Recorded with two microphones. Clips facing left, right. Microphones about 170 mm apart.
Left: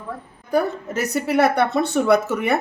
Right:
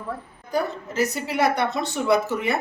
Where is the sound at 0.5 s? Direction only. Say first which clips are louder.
Left 4 dB; 60° left (ahead or behind).